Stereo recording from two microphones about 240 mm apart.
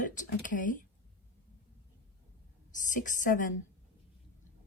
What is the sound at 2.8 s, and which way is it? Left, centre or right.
Speech, left.